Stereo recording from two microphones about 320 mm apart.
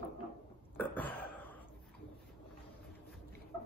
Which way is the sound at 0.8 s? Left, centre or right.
Centre.